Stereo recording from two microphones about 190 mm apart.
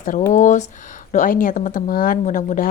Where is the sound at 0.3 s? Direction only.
40° left (ahead or behind).